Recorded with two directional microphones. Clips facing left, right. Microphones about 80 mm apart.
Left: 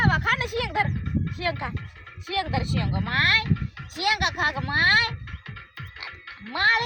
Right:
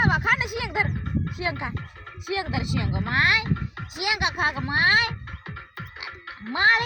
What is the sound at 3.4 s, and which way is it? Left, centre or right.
Music, right.